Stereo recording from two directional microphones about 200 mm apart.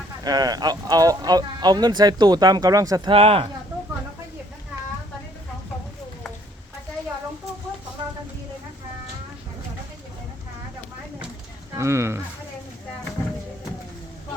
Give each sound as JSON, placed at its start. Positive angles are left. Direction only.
{"t": 0.3, "sound": "speech", "side_deg": -20}
{"t": 11.8, "sound": "speech", "side_deg": -15}